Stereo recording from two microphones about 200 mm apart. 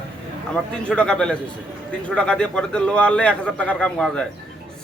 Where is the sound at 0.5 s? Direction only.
5° left (ahead or behind).